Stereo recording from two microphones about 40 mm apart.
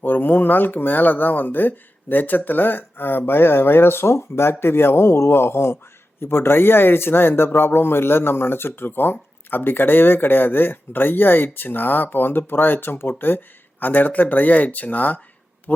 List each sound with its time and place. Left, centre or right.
0.0 s speech: left